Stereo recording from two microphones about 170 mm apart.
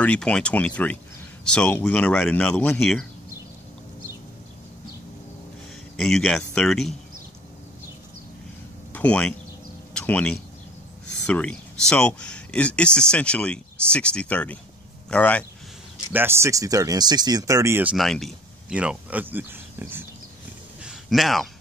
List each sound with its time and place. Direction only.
0.0 s speech: 5° left (ahead or behind)
5.9 s speech: 5° left (ahead or behind)
8.9 s speech: 5° left (ahead or behind)
16.1 s speech: 15° right (ahead or behind)
17.9 s speech: centre (ahead or behind)
20.8 s a sound: centre (ahead or behind)